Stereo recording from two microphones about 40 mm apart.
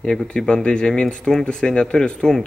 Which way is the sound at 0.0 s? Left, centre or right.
Centre.